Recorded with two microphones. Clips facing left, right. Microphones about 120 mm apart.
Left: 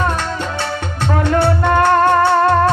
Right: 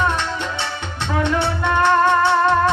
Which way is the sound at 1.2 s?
50° left (ahead or behind).